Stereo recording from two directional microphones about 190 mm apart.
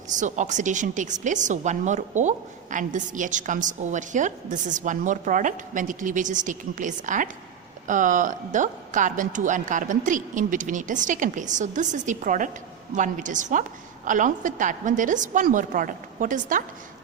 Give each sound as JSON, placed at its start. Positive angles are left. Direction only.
{"t": 0.1, "sound": "a woman's voice", "side_deg": -40}